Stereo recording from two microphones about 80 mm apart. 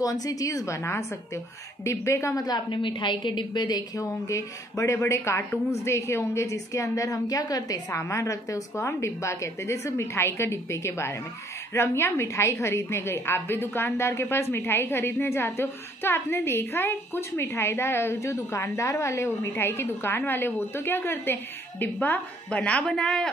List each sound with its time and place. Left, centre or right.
0.0 s a woman's voice: left
2.4 s a woman's voice: left; by 23.3 s centre